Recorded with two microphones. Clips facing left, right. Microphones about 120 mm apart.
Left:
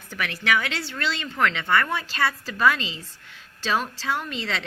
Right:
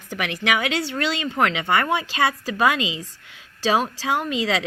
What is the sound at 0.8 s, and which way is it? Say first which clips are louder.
Speech: right 5 dB; 45° right (ahead or behind).